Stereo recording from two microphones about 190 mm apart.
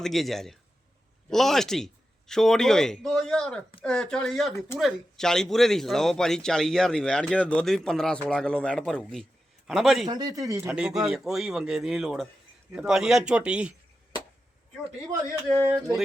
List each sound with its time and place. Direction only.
0.0 s speech: centre (ahead or behind)
10.1 s speech: 20° right (ahead or behind)
10.7 s speech: 5° right (ahead or behind)